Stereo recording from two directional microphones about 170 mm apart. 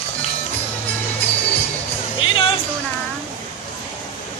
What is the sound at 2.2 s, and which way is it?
Music, 30° left (ahead or behind).